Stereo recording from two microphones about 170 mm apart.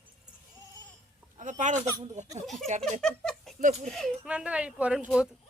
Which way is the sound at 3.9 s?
Centre (ahead or behind).